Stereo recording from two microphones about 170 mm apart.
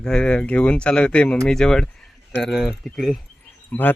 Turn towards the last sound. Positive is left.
turn(degrees=10)  # may be behind; listen again after turning